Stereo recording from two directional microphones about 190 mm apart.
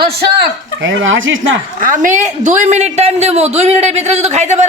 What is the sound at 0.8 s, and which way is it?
Speech, 85° right.